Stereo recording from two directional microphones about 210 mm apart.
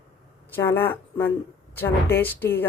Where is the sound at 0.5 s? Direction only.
10° left (ahead or behind).